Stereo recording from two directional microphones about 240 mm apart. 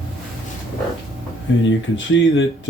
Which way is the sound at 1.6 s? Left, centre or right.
Left.